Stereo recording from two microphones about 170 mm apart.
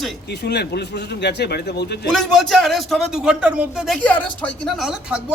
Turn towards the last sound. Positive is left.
turn(degrees=0)  # may be behind; listen again after turning